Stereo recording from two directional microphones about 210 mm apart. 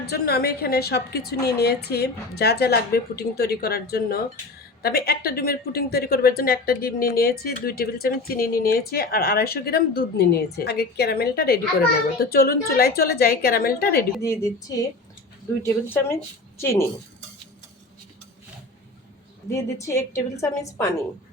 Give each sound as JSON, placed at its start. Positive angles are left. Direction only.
{"t": 0.0, "sound": "a woman's voice", "side_deg": 50}
{"t": 14.7, "sound": "a woman's voice", "side_deg": 15}
{"t": 19.5, "sound": "a woman's voice", "side_deg": 15}